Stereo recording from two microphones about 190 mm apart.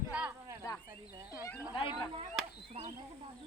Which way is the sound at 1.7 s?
25° left (ahead or behind).